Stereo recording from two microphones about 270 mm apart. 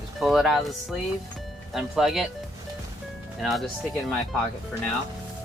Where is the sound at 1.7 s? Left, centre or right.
Centre.